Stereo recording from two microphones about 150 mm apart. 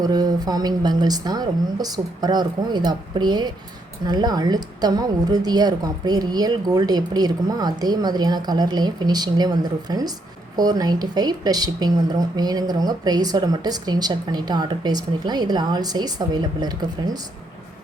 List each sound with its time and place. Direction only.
0.0 s a woman's voice: 25° right (ahead or behind)